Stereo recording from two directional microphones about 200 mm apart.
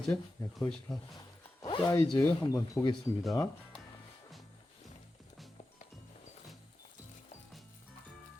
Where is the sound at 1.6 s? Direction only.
25° left (ahead or behind).